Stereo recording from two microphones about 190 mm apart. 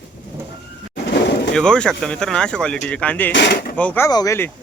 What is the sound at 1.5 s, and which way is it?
Speech, 5° left (ahead or behind).